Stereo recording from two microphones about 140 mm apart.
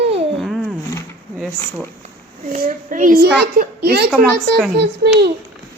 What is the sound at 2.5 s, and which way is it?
Speech, 70° right (ahead or behind).